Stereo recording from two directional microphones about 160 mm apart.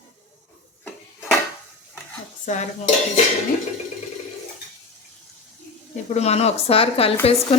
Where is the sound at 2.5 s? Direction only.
50° left (ahead or behind).